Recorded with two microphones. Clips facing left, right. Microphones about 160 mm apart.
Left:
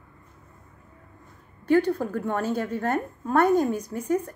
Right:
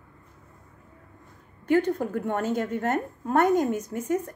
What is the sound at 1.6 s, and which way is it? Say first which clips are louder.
A woman's voice: left 1 dB; 20° right (ahead or behind).